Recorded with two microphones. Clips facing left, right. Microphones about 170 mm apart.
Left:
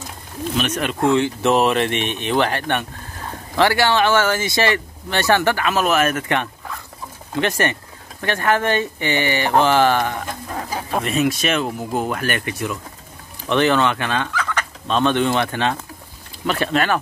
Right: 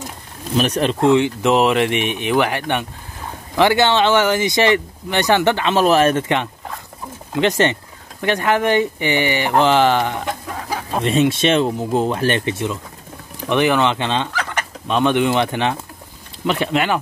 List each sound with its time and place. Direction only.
0.6 s speech: 35° right (ahead or behind)
1.0 s speech: 15° right (ahead or behind)
13.4 s chicken: 15° right (ahead or behind)
16.4 s speech: 15° right (ahead or behind)